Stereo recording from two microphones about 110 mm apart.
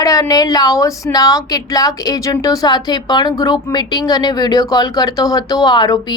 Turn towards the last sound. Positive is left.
turn(degrees=40)  # may be behind; listen again after turning